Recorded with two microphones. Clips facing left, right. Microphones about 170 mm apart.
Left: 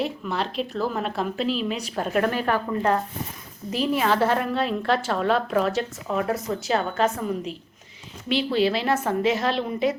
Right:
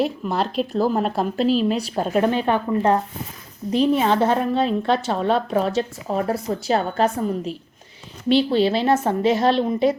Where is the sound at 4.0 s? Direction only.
25° right (ahead or behind).